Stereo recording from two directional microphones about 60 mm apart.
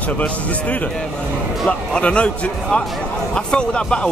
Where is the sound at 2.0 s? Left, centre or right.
Centre.